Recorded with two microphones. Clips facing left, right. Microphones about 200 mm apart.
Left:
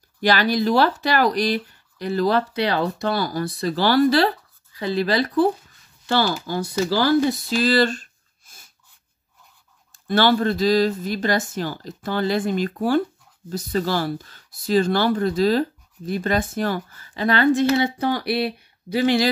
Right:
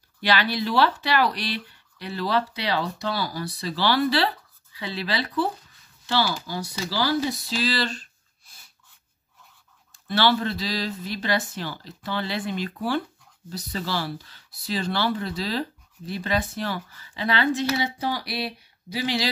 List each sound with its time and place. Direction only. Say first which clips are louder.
0.2 s speech: left 5 dB; 45° left (ahead or behind)
7.2 s a sound: left 6 dB; 50° left (ahead or behind)
9.9 s speech: left 4 dB; 45° left (ahead or behind)